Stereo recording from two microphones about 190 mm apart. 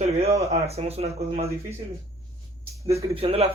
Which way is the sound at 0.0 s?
35° right (ahead or behind).